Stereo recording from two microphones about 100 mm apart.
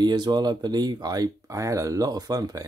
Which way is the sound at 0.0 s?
45° right (ahead or behind).